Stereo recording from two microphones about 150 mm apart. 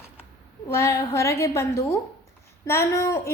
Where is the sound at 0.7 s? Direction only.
20° left (ahead or behind).